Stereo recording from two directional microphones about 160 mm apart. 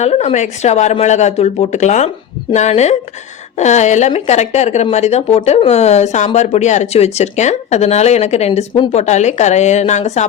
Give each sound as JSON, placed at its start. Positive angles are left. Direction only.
{"t": 0.0, "sound": "speech", "side_deg": 40}